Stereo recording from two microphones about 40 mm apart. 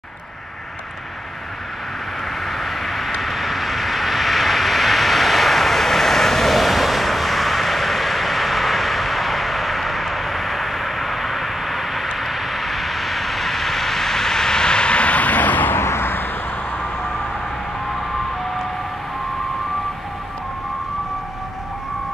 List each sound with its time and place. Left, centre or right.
2.4 s vehicle: centre; by 15.7 s left
15.7 s vehicle: left